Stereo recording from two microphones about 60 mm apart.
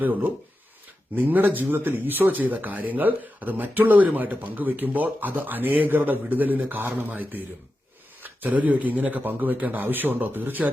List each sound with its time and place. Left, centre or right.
0.0 s speech: right